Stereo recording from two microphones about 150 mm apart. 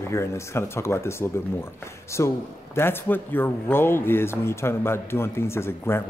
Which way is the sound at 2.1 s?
15° left (ahead or behind).